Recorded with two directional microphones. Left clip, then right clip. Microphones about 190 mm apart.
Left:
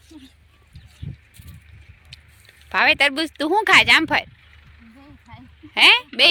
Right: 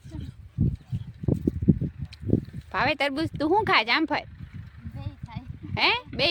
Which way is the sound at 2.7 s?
5° right (ahead or behind).